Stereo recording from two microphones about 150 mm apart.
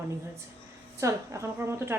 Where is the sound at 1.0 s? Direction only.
20° right (ahead or behind).